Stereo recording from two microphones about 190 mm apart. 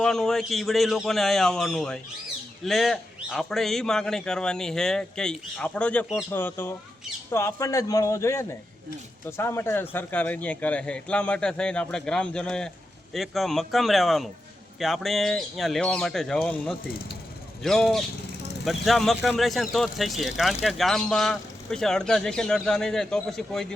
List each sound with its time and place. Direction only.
0.0 s speech: centre (ahead or behind)